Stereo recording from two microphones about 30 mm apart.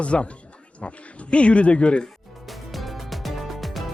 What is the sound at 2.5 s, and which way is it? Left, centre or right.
Music, centre.